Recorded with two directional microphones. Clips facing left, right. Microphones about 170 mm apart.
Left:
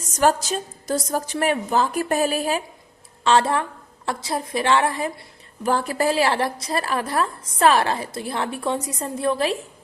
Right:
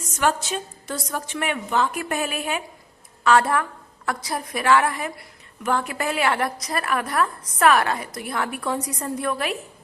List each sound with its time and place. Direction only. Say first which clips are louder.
0.1 s a woman's voice: left 4 dB; 35° left (ahead or behind)